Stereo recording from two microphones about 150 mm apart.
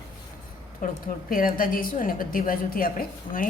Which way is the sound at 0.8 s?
60° left (ahead or behind).